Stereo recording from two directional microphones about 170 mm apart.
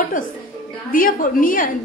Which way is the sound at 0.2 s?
55° left (ahead or behind).